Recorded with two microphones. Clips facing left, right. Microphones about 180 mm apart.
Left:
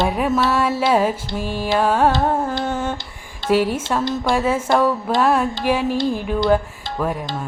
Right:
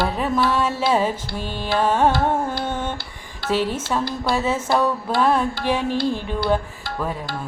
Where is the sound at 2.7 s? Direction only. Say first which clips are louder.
Left 3 dB; 5° left (ahead or behind).